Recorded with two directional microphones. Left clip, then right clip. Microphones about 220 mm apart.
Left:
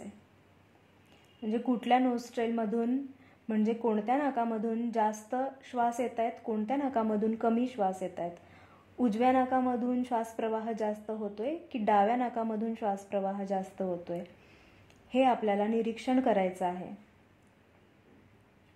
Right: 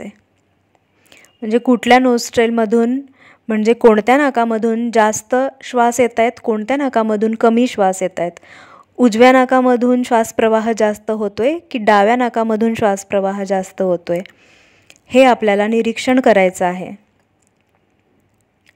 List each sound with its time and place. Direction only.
1.1 s a woman's voice: 45° right (ahead or behind)